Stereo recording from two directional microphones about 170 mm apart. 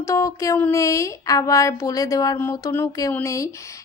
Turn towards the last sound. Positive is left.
turn(degrees=20)  # may be behind; listen again after turning